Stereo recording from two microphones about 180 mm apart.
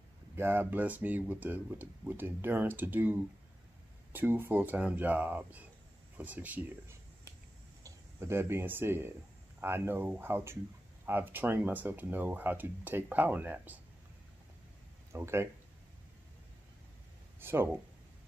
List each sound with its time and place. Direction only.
0.4 s speech: 10° right (ahead or behind)
15.1 s speech: 15° right (ahead or behind)
17.4 s speech: 15° right (ahead or behind)